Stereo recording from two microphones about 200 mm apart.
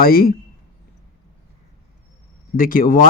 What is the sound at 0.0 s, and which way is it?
Speech, 45° left (ahead or behind).